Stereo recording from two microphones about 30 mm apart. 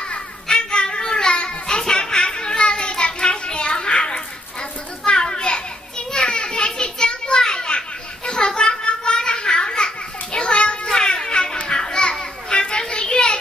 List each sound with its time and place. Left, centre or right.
0.1 s children playing: left
8.3 s a sound: left
10.9 s music: left
11.6 s children playing: left